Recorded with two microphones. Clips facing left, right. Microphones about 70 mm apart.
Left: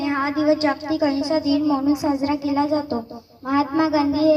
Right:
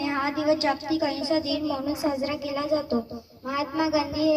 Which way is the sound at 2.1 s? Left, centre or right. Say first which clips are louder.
Left 7 dB; left.